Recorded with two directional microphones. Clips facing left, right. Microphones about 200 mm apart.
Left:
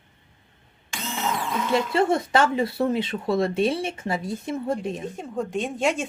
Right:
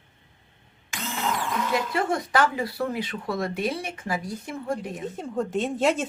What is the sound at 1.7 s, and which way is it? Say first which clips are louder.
Speech: left 6 dB; 25° left (ahead or behind).